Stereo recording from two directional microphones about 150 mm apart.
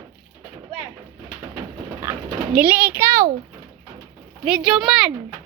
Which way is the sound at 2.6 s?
10° right (ahead or behind).